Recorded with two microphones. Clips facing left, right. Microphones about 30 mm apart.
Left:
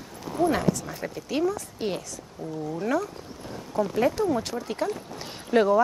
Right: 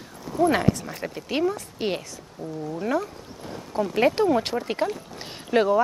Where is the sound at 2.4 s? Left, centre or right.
Centre.